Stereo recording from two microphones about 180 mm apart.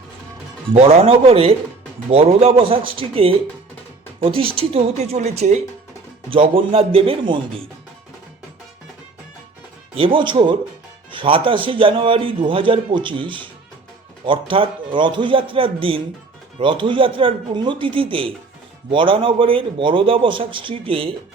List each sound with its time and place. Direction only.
0.7 s speech: 35° right (ahead or behind)
9.9 s a man's voice: 30° right (ahead or behind)